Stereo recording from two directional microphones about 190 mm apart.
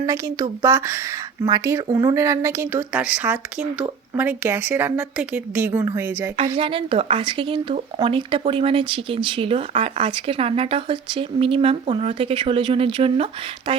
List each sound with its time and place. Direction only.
0.0 s speech: 20° right (ahead or behind)
6.6 s speech: 30° right (ahead or behind)